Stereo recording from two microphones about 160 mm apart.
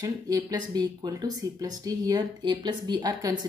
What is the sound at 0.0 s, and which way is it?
Speech, 25° right (ahead or behind).